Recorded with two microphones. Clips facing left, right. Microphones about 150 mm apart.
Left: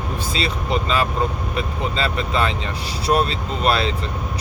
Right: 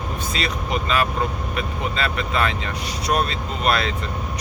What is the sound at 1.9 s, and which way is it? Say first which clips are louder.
Speech: left 2 dB; 30° left (ahead or behind).